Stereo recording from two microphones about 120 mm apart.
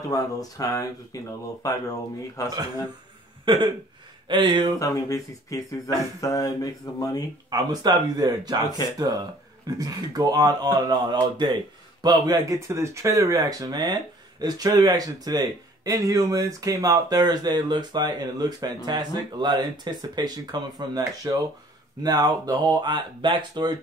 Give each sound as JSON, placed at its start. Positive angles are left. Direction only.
{"t": 0.1, "sound": "speech", "side_deg": 30}
{"t": 2.4, "sound": "speech", "side_deg": 30}
{"t": 3.5, "sound": "speech", "side_deg": -45}
{"t": 4.7, "sound": "speech", "side_deg": 30}
{"t": 7.4, "sound": "speech", "side_deg": -35}